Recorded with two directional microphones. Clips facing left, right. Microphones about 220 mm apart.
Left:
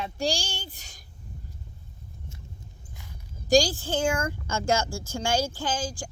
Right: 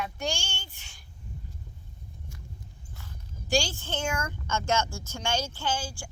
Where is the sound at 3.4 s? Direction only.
35° left (ahead or behind).